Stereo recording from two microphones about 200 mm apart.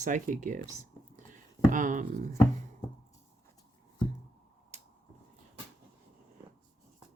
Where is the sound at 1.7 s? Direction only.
40° right (ahead or behind).